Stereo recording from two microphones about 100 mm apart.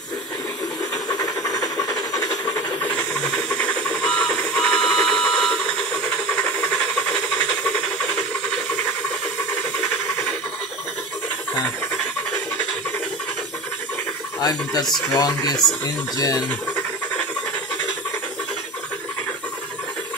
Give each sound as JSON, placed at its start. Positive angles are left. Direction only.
{"t": 1.0, "sound": "steam", "side_deg": 40}
{"t": 3.0, "sound": "hiss", "side_deg": 10}
{"t": 3.4, "sound": "a sound", "side_deg": 10}
{"t": 14.4, "sound": "speech", "side_deg": 40}